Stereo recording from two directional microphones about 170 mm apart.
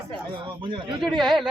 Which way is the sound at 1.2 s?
Centre (ahead or behind).